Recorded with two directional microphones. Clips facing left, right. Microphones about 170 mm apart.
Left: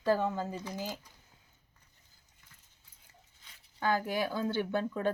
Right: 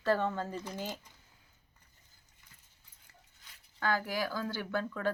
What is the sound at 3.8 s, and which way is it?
Speech, 20° left (ahead or behind).